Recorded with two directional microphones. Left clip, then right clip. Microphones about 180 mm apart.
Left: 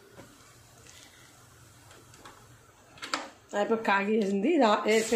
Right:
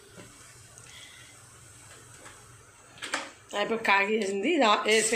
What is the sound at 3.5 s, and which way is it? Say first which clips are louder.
Speech: right 1 dB; 45° left (ahead or behind).